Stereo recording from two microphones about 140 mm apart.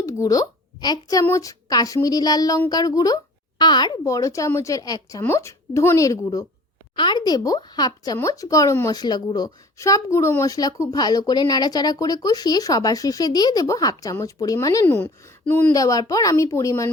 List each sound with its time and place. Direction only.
0.0 s a child's voice: 25° left (ahead or behind)
14.8 s speech: 15° left (ahead or behind)
15.7 s speech: 25° left (ahead or behind)